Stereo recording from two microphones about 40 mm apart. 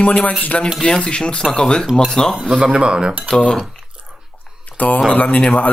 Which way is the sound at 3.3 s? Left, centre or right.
Left.